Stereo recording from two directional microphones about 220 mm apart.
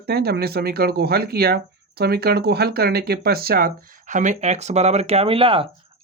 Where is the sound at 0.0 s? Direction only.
45° right (ahead or behind).